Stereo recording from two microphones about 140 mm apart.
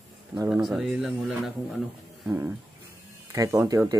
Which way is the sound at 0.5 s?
5° right (ahead or behind).